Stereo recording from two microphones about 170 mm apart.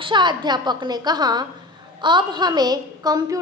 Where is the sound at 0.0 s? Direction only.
25° right (ahead or behind).